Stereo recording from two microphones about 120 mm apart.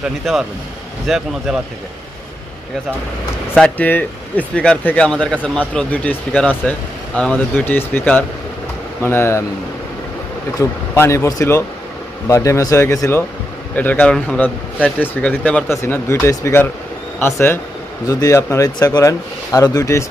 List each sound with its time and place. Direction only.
0.2 s speech: centre (ahead or behind)
3.5 s speech: 10° left (ahead or behind)
10.6 s speech: 25° left (ahead or behind)
15.7 s speech: 20° left (ahead or behind)
18.0 s speech: 30° left (ahead or behind)